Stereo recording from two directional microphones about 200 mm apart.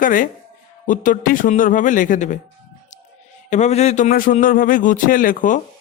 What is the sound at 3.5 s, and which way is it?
A man's voice, 35° left (ahead or behind).